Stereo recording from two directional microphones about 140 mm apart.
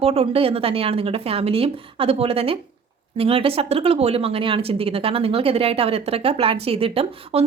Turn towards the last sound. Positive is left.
turn(degrees=-45)  # may be behind; listen again after turning